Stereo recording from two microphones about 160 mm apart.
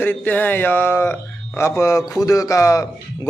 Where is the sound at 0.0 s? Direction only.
10° left (ahead or behind).